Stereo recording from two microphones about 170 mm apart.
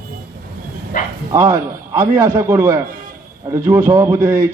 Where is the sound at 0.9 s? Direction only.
50° left (ahead or behind).